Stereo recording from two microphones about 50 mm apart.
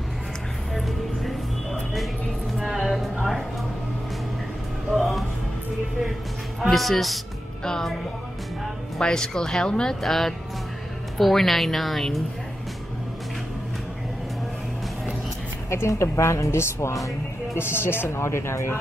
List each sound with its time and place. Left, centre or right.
0.7 s music: centre
2.5 s a sound: centre
4.9 s music: centre
6.7 s a woman's voice: centre
9.0 s a woman's voice: centre
15.7 s a woman's voice: left
17.6 s speech: left
18.2 s a woman's voice: left